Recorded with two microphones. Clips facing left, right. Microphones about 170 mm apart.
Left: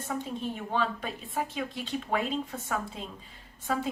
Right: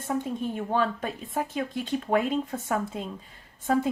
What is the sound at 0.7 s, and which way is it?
Speech, 45° right (ahead or behind).